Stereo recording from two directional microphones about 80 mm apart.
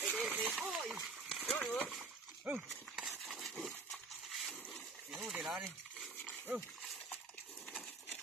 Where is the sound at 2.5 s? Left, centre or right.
Centre.